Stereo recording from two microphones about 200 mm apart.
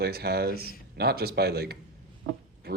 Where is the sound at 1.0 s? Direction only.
50° right (ahead or behind).